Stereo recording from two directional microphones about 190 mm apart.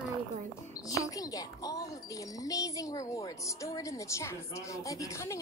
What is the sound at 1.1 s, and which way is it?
Speech, 20° left (ahead or behind).